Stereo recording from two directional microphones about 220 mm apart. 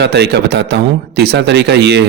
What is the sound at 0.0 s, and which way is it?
A man's voice, 50° right (ahead or behind).